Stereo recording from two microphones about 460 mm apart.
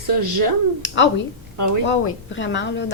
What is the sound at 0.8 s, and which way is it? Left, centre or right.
A woman's voice, left.